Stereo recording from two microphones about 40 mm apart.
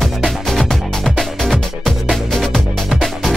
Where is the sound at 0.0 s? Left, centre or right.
Centre.